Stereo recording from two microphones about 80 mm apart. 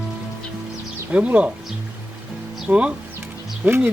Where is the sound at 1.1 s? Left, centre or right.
Centre.